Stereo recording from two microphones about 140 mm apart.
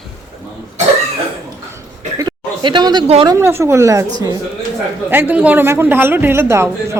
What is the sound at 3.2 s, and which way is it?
A woman's voice, 20° right (ahead or behind).